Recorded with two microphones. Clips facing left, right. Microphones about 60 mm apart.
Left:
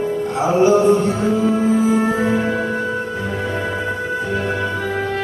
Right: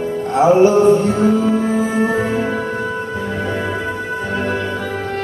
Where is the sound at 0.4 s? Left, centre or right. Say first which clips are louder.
Right 4 dB; right.